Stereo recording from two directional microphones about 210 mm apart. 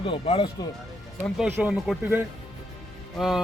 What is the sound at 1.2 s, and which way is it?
Speech, centre (ahead or behind).